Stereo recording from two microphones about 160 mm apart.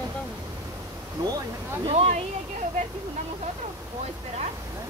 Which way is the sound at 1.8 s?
40° right (ahead or behind).